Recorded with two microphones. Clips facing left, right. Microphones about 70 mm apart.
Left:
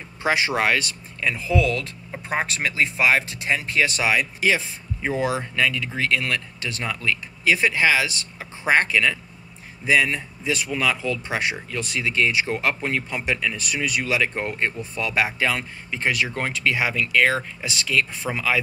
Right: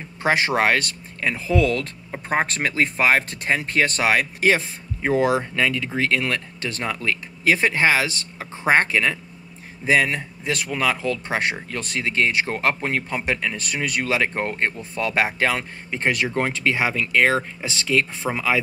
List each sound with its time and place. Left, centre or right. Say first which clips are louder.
0.2 s speech: right 2 dB; right